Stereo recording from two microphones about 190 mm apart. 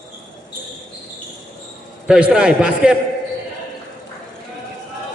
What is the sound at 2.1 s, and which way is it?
Speech, 5° right (ahead or behind).